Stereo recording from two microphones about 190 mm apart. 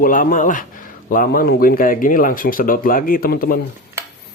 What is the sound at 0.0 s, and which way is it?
Speech, 45° left (ahead or behind).